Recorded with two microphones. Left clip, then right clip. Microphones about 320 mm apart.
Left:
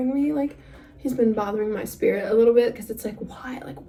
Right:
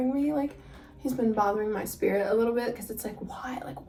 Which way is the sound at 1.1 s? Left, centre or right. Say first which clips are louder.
Left 3 dB; centre.